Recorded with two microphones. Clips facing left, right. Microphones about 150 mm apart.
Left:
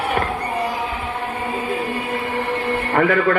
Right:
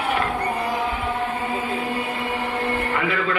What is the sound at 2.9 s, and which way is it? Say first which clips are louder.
Speech: left 7 dB; 50° left (ahead or behind).